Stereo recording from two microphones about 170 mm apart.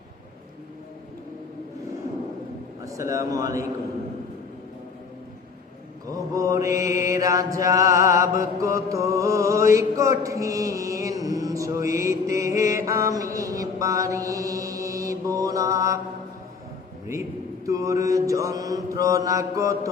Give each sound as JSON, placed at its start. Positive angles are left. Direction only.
{"t": 2.8, "sound": "mantra", "side_deg": -20}
{"t": 6.1, "sound": "mantra", "side_deg": -20}
{"t": 17.7, "sound": "mantra", "side_deg": -20}